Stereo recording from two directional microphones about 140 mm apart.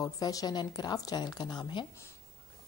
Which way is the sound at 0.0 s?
25° left (ahead or behind).